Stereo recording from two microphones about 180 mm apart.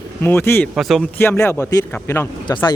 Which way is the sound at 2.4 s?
25° left (ahead or behind).